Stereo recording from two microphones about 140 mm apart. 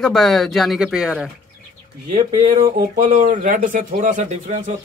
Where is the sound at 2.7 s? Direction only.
70° right (ahead or behind).